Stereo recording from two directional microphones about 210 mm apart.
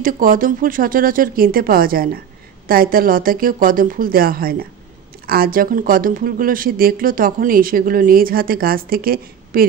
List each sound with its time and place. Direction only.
0.0 s speech: 40° right (ahead or behind)